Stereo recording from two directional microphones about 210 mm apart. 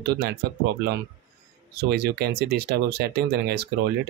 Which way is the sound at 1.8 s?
50° right (ahead or behind).